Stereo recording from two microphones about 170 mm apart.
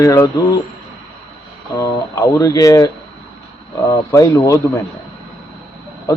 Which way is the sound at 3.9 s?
20° left (ahead or behind).